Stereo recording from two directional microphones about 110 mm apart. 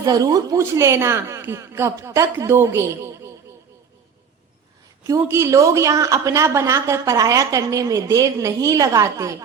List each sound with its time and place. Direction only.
0.0 s a woman's voice: 35° right (ahead or behind)
5.0 s a woman's voice: 30° right (ahead or behind)